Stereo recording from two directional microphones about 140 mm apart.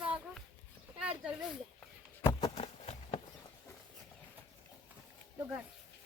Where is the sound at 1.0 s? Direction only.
10° right (ahead or behind).